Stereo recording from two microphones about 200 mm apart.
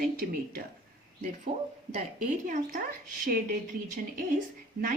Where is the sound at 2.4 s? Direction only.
40° right (ahead or behind).